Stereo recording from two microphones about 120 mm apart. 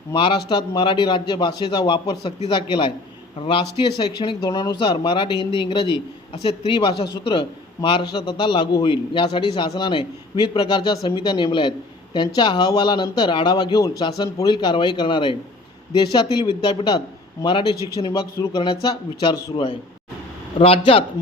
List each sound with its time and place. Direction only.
0.1 s a man's voice: 40° left (ahead or behind)
18.0 s a man's voice: 35° left (ahead or behind); by 21.0 s 50° left (ahead or behind)